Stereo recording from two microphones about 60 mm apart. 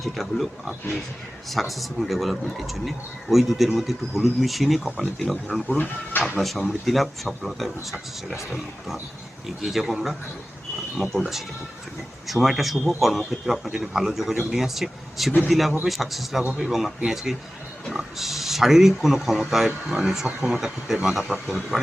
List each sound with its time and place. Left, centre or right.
0.0 s speech: centre
5.7 s speech: left
6.4 s speech: centre
12.3 s speech: centre
17.9 s speech: centre